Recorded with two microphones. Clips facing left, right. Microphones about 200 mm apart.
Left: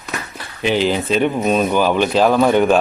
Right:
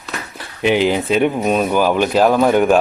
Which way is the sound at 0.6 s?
15° right (ahead or behind).